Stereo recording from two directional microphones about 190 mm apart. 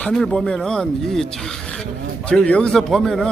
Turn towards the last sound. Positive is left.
turn(degrees=0)  # may be behind; listen again after turning